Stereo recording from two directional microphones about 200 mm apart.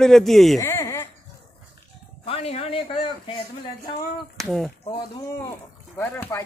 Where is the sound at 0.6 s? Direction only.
10° left (ahead or behind).